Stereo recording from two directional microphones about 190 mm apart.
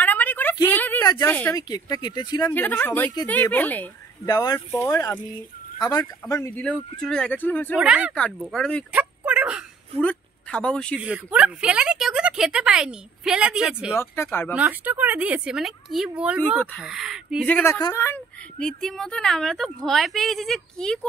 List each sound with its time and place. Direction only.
0.0 s a sound: 10° left (ahead or behind)
1.6 s speech: 20° left (ahead or behind)
2.5 s speech: 10° left (ahead or behind)
4.3 s speech: 20° left (ahead or behind)
7.7 s speech: 5° right (ahead or behind)
8.9 s a sound: 5° right (ahead or behind)
10.0 s speech: 5° left (ahead or behind)
11.0 s speech: 5° right (ahead or behind)
13.9 s speech: 15° left (ahead or behind)
14.5 s speech: 10° right (ahead or behind)
17.5 s speech: 10° left (ahead or behind)